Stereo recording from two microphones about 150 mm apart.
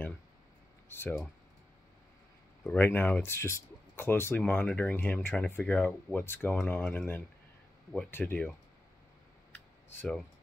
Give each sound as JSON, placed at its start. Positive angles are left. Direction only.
{"t": 0.8, "sound": "speech", "side_deg": 15}
{"t": 2.6, "sound": "speech", "side_deg": 10}